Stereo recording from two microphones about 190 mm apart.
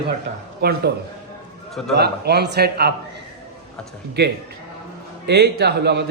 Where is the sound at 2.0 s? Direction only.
60° right (ahead or behind).